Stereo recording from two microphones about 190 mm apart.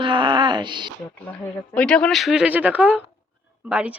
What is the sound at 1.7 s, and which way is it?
Speech, 5° left (ahead or behind).